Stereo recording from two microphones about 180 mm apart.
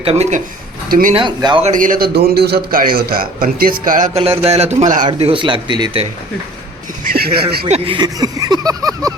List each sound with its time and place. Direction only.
0.0 s a man's voice: 35° right (ahead or behind)
0.9 s speech: 55° right (ahead or behind)
1.1 s speech: 25° right (ahead or behind)
1.6 s a man's voice: 45° right (ahead or behind)
4.1 s a man's voice: 30° right (ahead or behind)
5.0 s a man's voice: 30° right (ahead or behind)
7.0 s speech: 55° right (ahead or behind)
7.7 s speech: 25° right (ahead or behind)